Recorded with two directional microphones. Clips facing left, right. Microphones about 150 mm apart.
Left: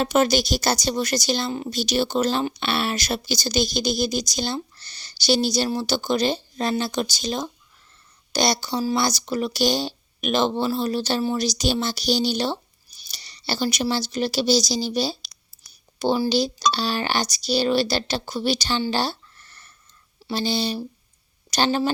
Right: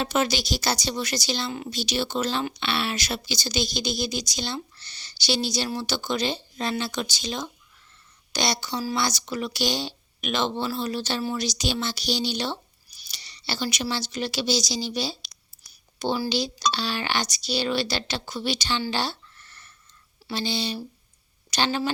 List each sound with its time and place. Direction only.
0.0 s a woman's voice: 45° left (ahead or behind)
18.9 s a sound: 40° left (ahead or behind)
20.3 s speech: 40° left (ahead or behind)